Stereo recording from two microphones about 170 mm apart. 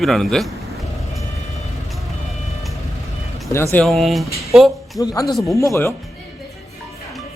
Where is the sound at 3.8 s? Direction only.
Centre (ahead or behind).